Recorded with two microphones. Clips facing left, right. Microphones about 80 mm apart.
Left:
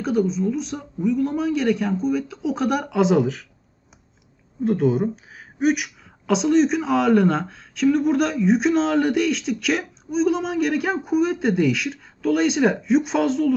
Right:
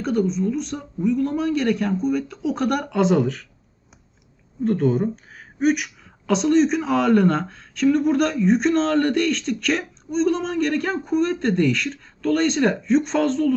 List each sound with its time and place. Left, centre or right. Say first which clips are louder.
0.0 s speech: even; centre
4.6 s speech: even; centre